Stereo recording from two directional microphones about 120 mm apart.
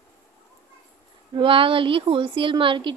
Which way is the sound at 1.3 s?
45° right (ahead or behind).